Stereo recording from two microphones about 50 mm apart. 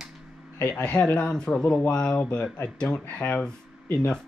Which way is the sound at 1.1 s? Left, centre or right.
Centre.